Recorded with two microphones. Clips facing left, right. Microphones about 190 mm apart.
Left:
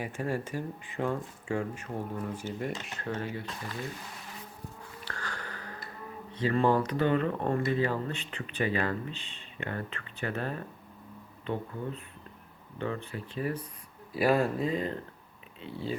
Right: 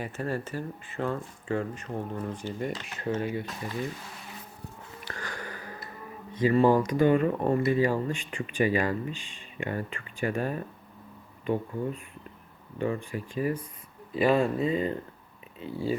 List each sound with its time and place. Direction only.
0.0 s speech: 10° left (ahead or behind)
3.1 s speech: 20° right (ahead or behind)
5.0 s music: 10° right (ahead or behind)
6.3 s speech: 10° right (ahead or behind)
14.1 s speech: 5° left (ahead or behind)